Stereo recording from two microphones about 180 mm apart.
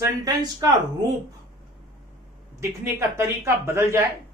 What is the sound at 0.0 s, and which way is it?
Speech, 20° right (ahead or behind).